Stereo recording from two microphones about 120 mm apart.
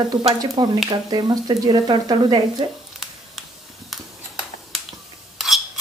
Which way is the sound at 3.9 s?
Centre (ahead or behind).